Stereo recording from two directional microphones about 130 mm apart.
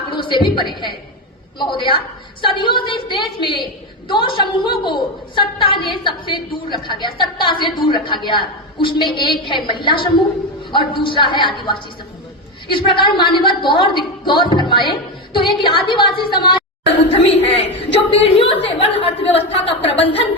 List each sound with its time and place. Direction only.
0.1 s a woman's voice: 40° left (ahead or behind)
17.4 s a woman's voice: 50° left (ahead or behind)